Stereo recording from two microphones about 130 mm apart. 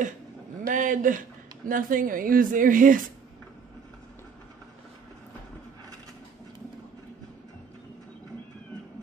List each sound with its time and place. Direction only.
0.7 s speech: 90° right